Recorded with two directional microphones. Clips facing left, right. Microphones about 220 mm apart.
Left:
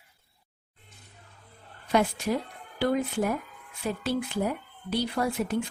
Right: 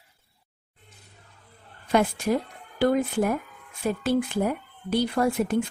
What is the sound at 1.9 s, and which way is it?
Speech, 50° right (ahead or behind).